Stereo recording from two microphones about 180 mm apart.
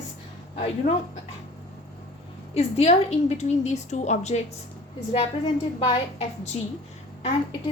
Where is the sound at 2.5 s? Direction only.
35° left (ahead or behind).